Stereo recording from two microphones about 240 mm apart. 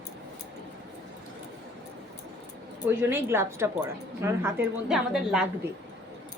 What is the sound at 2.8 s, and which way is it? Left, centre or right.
A woman's voice, centre.